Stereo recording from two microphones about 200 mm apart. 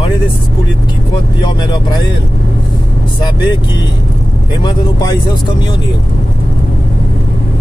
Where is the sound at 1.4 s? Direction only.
20° left (ahead or behind).